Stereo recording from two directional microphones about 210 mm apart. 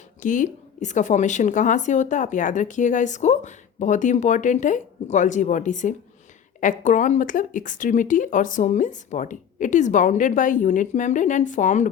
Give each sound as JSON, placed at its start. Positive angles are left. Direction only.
{"t": 0.2, "sound": "a woman's voice", "side_deg": 40}